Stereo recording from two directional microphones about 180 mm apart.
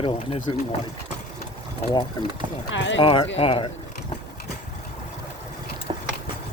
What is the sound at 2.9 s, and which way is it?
Speech, 30° left (ahead or behind).